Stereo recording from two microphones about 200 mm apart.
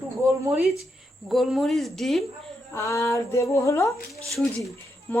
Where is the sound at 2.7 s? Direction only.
15° left (ahead or behind).